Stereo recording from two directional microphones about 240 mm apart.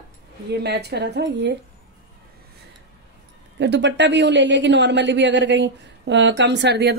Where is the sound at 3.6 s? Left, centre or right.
Right.